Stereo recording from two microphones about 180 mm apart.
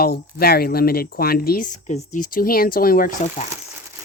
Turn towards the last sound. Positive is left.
turn(degrees=45)  # may be behind; listen again after turning